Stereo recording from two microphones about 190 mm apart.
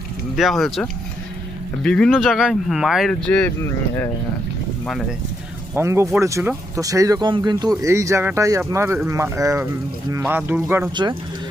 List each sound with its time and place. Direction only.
0.3 s speech: centre (ahead or behind)
5.7 s speech: 15° right (ahead or behind)
10.9 s speech: 25° right (ahead or behind)